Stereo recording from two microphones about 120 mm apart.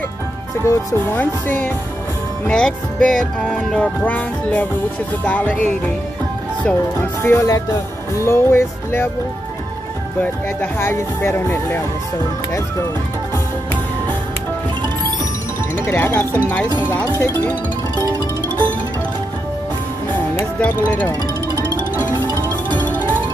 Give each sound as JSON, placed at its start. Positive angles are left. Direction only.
{"t": 0.7, "sound": "speech", "side_deg": 20}
{"t": 7.2, "sound": "speech", "side_deg": 25}
{"t": 10.2, "sound": "speech", "side_deg": 15}
{"t": 15.7, "sound": "speech", "side_deg": 15}
{"t": 20.6, "sound": "speech", "side_deg": 15}
{"t": 22.8, "sound": "music", "side_deg": 15}